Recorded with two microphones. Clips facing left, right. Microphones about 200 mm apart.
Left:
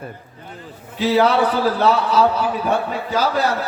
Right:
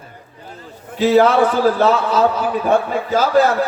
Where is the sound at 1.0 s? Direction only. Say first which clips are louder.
Right 4 dB; 45° right (ahead or behind).